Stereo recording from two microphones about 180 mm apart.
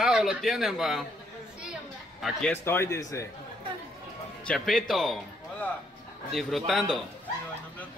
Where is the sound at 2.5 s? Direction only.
15° left (ahead or behind).